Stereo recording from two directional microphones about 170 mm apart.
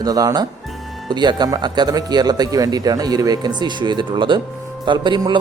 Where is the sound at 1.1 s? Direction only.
25° right (ahead or behind).